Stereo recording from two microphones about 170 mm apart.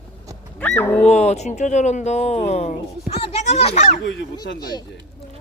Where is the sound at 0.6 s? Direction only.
10° left (ahead or behind).